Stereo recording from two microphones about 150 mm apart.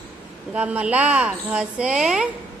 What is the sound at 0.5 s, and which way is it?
A woman's voice, 10° right (ahead or behind).